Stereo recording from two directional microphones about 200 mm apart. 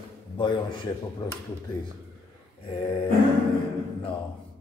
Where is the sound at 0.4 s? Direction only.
25° left (ahead or behind).